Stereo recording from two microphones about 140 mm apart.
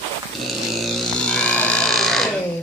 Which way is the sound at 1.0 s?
10° left (ahead or behind).